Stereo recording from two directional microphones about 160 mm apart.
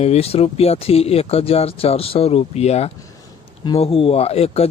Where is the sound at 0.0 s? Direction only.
40° left (ahead or behind).